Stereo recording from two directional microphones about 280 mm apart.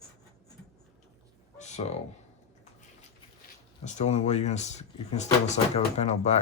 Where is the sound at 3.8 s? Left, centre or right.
Left.